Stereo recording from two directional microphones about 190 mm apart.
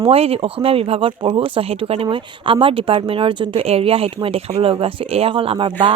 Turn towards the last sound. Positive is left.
turn(degrees=-25)  # may be behind; listen again after turning